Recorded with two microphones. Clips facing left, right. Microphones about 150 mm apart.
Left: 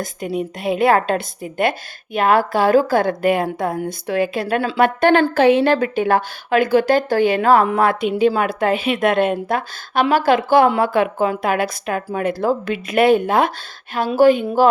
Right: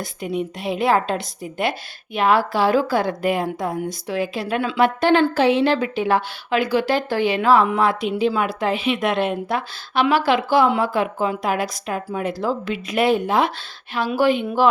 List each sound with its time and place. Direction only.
0.3 s a woman's voice: 50° left (ahead or behind)
4.8 s a woman's voice: 55° left (ahead or behind)